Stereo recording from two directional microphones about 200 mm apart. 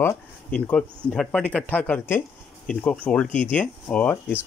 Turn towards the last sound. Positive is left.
turn(degrees=5)  # may be behind; listen again after turning